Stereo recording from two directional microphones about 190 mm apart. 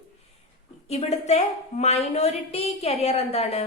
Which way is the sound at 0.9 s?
35° left (ahead or behind).